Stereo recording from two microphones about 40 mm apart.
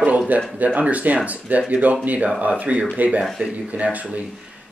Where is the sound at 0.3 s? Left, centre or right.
Right.